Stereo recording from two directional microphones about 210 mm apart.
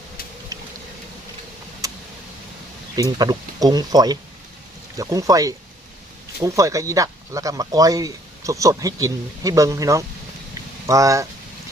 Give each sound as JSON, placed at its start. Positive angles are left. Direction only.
{"t": 0.5, "sound": "vehicle", "side_deg": -15}
{"t": 1.8, "sound": "a sound", "side_deg": -15}
{"t": 2.9, "sound": "speech", "side_deg": -20}